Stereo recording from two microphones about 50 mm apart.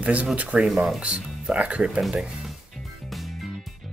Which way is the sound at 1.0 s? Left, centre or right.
Right.